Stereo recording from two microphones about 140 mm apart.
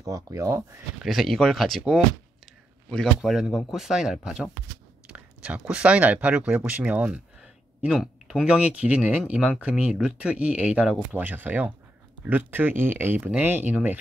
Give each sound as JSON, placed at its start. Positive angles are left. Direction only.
{"t": 0.0, "sound": "speech", "side_deg": -25}
{"t": 1.0, "sound": "speech", "side_deg": 0}
{"t": 2.4, "sound": "a sound", "side_deg": 5}
{"t": 3.7, "sound": "speech", "side_deg": -5}